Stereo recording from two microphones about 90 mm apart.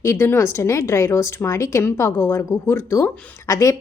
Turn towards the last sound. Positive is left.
turn(degrees=35)  # may be behind; listen again after turning